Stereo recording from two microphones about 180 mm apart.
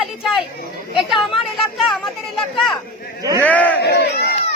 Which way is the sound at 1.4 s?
Centre (ahead or behind).